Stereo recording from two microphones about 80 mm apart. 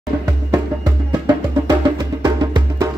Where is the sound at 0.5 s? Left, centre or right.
Right.